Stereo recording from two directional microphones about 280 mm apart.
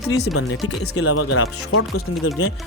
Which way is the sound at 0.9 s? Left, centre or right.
Left.